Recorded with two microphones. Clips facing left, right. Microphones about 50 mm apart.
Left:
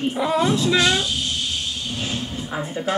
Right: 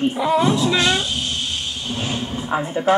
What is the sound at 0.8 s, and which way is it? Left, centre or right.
Speech, centre.